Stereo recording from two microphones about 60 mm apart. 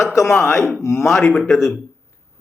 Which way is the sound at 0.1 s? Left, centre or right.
Left.